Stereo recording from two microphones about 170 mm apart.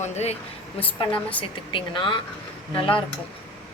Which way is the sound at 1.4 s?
30° left (ahead or behind).